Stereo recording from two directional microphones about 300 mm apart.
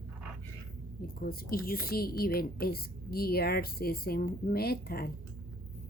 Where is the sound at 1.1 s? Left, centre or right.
Left.